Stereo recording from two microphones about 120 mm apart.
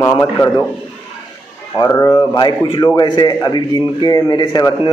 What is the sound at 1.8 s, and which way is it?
A man's voice, 30° left (ahead or behind).